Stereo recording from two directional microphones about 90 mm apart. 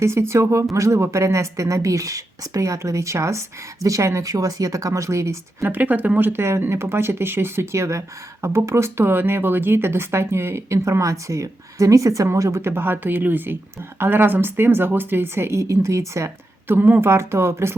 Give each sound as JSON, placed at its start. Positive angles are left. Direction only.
{"t": 0.0, "sound": "speech", "side_deg": -30}
{"t": 5.6, "sound": "speech", "side_deg": -20}